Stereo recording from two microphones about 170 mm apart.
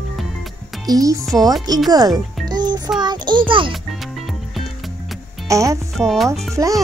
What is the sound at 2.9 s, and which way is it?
Speech, 25° right (ahead or behind).